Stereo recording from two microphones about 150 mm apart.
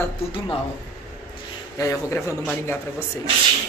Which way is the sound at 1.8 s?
20° left (ahead or behind).